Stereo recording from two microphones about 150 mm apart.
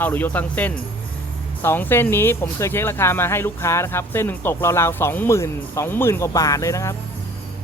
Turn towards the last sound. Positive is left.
turn(degrees=20)  # may be behind; listen again after turning